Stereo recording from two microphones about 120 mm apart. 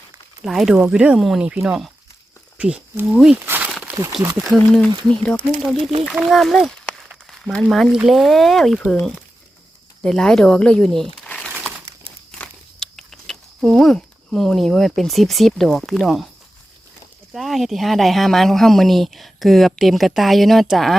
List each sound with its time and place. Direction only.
0.4 s speech: centre (ahead or behind)
3.4 s crumpling: 15° right (ahead or behind)
3.9 s a sound: 15° right (ahead or behind)
4.4 s speech: 5° left (ahead or behind)
12.3 s a sound: 5° left (ahead or behind)
17.3 s speech: centre (ahead or behind)